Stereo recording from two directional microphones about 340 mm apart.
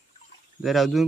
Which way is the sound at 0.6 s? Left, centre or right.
Centre.